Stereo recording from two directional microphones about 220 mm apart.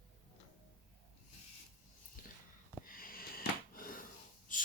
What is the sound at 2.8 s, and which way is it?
Wheeze, 40° left (ahead or behind).